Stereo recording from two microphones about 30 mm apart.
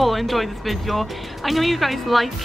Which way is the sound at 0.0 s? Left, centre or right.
Centre.